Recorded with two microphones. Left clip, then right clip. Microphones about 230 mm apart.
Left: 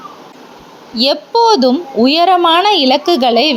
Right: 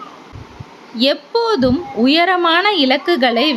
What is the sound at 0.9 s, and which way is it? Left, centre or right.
A woman's voice, centre.